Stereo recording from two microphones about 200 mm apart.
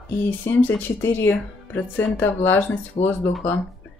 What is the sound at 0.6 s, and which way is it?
Speech, 10° left (ahead or behind).